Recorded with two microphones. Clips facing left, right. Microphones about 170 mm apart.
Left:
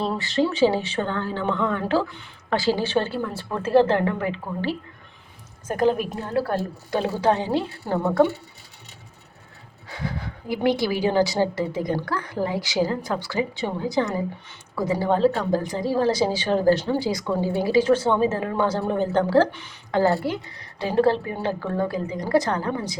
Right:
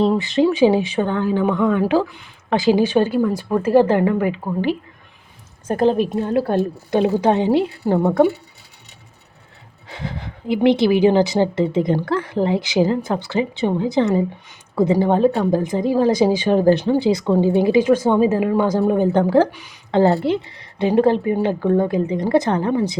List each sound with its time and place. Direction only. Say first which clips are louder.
0.0 s a woman's voice: right 7 dB; 20° right (ahead or behind)
5.6 s speech: right 5 dB; 30° right (ahead or behind)
9.9 s a woman's voice: right 1 dB; 20° right (ahead or behind)
19.9 s speech: right 5 dB; 25° right (ahead or behind)